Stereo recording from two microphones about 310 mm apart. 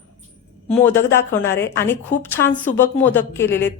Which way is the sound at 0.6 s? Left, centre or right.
Centre.